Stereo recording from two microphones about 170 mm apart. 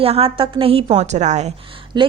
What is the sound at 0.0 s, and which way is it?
A woman's voice, 35° right (ahead or behind).